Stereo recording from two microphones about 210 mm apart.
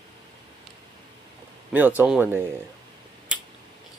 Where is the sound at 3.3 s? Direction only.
5° right (ahead or behind).